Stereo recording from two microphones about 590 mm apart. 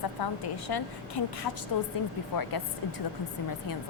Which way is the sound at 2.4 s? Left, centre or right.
Left.